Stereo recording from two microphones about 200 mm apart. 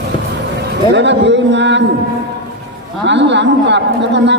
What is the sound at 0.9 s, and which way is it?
Speech, 60° right (ahead or behind).